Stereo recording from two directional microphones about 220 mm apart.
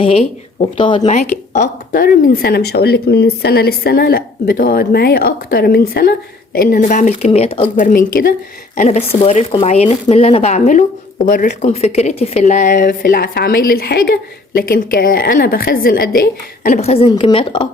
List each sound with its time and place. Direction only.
0.0 s speech: 25° left (ahead or behind)
7.8 s speech: 40° left (ahead or behind); by 17.7 s 20° left (ahead or behind)